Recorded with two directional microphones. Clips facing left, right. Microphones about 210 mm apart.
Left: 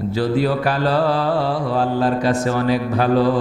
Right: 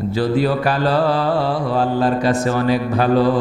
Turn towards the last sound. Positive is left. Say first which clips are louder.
# right 1 dB
turn(degrees=-15)  # may be behind; listen again after turning